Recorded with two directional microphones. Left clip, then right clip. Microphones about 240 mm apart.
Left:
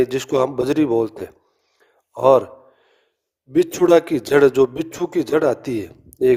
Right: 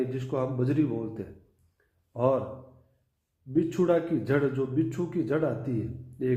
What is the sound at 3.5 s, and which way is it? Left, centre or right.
A man's voice, left.